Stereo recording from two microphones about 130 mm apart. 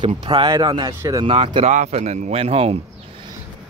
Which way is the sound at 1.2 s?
45° right (ahead or behind).